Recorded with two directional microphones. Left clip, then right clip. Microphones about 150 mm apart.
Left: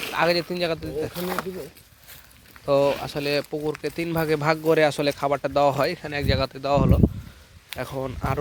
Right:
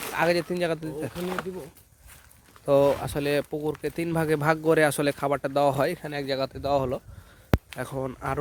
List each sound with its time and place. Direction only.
0.1 s speech: 40° right (ahead or behind)
1.1 s speech: 90° left
2.6 s speech: 55° right (ahead or behind)
3.5 s speech: 35° right (ahead or behind)
6.1 s speech: 15° right (ahead or behind)